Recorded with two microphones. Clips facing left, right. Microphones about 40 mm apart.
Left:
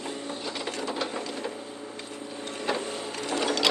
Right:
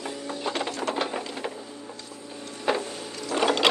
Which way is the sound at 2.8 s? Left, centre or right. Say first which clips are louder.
Left 2 dB; left.